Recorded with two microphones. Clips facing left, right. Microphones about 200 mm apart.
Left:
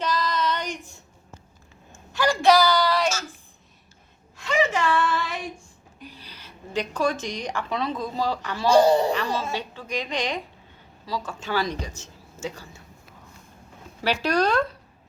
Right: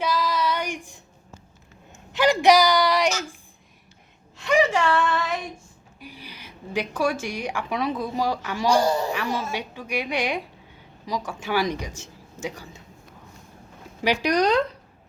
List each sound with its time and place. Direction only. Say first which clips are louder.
0.0 s child singing: right 1 dB; 10° right (ahead or behind)
2.1 s a sound: right 2 dB; 20° right (ahead or behind)
4.4 s gasp: right 3 dB; 15° right (ahead or behind)
4.9 s female singing: right 1 dB; 5° left (ahead or behind)
6.0 s a woman's voice: right 2 dB; 10° right (ahead or behind)
14.0 s speech: right 2 dB; 15° right (ahead or behind)